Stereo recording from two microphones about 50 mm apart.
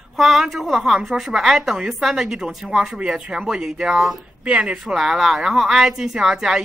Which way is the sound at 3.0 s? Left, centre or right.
Centre.